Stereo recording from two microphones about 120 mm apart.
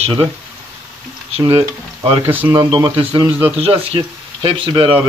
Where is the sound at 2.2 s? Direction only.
15° right (ahead or behind).